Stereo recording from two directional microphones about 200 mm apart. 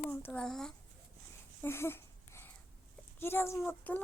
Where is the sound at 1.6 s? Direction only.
10° left (ahead or behind).